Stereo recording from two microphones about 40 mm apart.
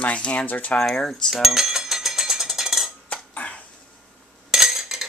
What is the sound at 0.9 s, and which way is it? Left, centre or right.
Speech, centre.